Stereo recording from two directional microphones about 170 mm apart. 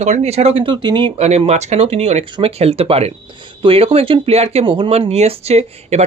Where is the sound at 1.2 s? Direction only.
40° right (ahead or behind).